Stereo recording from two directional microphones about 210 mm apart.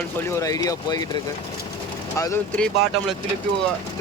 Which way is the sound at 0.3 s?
15° left (ahead or behind).